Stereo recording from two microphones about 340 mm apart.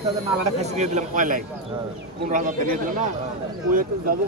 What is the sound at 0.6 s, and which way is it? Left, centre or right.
Speech, centre.